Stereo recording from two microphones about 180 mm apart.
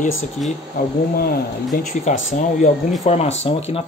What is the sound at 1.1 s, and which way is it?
Speech, 55° left (ahead or behind).